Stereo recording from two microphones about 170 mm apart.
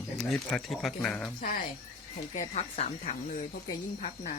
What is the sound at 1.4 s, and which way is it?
Speech, 55° left (ahead or behind).